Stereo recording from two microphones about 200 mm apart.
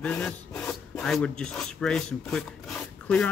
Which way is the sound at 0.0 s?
5° left (ahead or behind).